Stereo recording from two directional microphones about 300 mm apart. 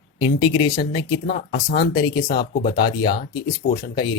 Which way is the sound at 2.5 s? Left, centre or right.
Left.